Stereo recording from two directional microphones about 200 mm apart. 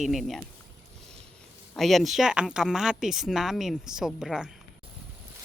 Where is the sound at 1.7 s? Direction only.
Centre (ahead or behind).